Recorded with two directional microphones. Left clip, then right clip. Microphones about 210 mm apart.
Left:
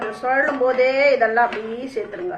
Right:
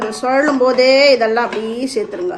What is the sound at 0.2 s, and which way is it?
A woman's voice, 60° right (ahead or behind).